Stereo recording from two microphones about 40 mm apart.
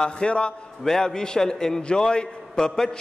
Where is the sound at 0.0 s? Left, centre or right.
Left.